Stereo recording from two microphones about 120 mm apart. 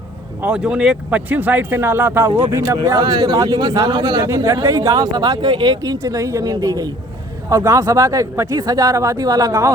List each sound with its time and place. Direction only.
0.4 s speech: 5° right (ahead or behind); by 4.3 s 35° right (ahead or behind)
4.3 s speech: 25° right (ahead or behind)